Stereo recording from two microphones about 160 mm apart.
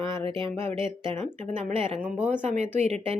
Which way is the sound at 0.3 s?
35° right (ahead or behind).